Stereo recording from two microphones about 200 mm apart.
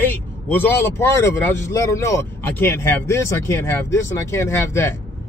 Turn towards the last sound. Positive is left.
turn(degrees=15)  # may be behind; listen again after turning